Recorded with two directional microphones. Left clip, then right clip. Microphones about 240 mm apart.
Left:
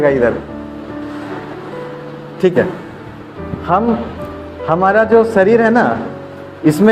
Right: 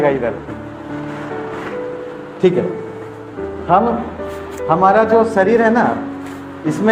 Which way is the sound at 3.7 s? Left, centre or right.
Left.